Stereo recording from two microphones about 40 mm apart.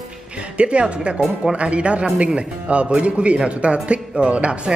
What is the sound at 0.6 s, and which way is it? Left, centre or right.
A man's voice, right.